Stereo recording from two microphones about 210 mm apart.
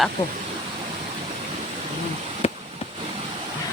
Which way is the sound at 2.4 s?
30° left (ahead or behind).